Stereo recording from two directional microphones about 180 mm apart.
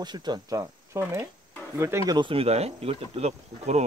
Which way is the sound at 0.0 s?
25° right (ahead or behind).